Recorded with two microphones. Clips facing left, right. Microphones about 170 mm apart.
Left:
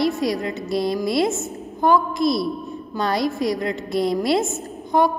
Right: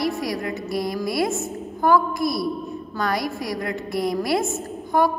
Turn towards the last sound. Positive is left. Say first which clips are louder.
# left 1 dB
turn(degrees=20)  # may be behind; listen again after turning